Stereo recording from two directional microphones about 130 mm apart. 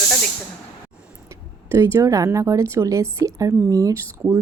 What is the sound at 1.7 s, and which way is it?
Speech, 25° right (ahead or behind).